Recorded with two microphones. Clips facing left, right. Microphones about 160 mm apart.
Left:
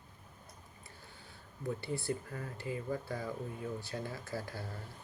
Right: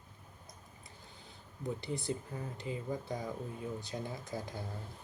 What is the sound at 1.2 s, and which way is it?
Speech, 20° right (ahead or behind).